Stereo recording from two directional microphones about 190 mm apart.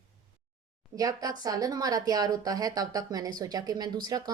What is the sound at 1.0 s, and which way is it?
Speech, 20° right (ahead or behind).